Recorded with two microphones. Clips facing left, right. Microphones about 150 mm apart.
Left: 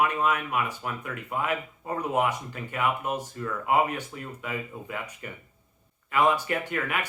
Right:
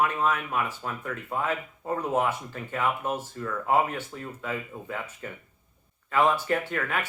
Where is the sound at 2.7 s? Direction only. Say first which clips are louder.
Even; 15° left (ahead or behind).